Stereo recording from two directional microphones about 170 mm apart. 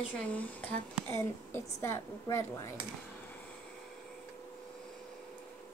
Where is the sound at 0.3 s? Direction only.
10° left (ahead or behind).